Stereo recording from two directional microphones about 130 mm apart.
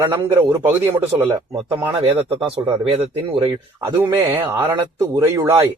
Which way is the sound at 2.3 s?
40° right (ahead or behind).